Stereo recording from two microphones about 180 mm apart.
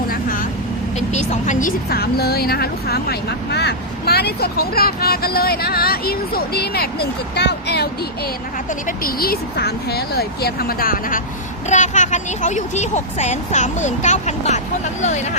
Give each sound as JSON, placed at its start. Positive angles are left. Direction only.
{"t": 0.1, "sound": "vehicle", "side_deg": 50}
{"t": 0.9, "sound": "a woman's voice", "side_deg": 40}
{"t": 8.9, "sound": "a woman's voice", "side_deg": 55}